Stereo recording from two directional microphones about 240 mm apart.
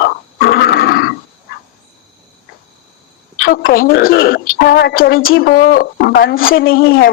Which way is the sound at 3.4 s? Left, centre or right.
Left.